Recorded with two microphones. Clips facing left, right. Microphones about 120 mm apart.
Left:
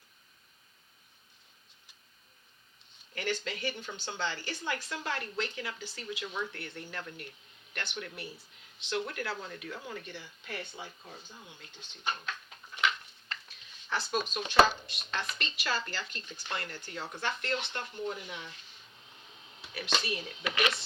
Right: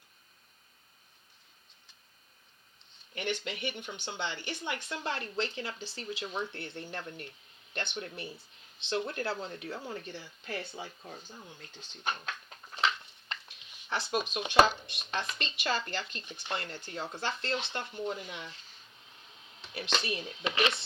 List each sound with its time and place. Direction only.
3.2 s speech: 20° right (ahead or behind); by 12.3 s 40° right (ahead or behind)
12.7 s a sound: 35° right (ahead or behind)
13.9 s speech: 20° right (ahead or behind)
20.0 s speech: 25° right (ahead or behind)